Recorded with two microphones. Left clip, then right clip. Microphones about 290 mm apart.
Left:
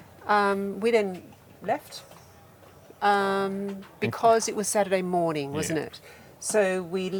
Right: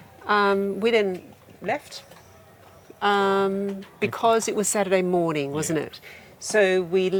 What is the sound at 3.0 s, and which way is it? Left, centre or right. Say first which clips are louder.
Speech: right 3 dB; centre.